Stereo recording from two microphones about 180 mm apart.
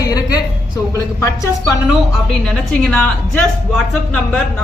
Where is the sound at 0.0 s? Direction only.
20° left (ahead or behind).